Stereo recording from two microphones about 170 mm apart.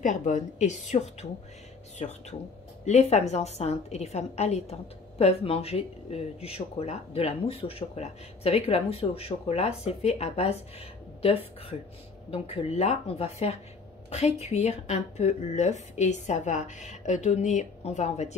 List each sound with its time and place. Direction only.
0.0 s a woman's voice: 45° left (ahead or behind)
12.3 s a woman's voice: 35° left (ahead or behind)